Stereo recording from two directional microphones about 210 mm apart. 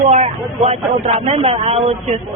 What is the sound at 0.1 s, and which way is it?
Speech, 30° right (ahead or behind).